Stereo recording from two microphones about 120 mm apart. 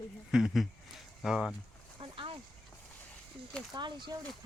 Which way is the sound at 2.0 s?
45° right (ahead or behind).